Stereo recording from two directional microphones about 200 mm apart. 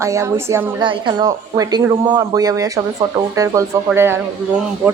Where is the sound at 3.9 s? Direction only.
10° right (ahead or behind).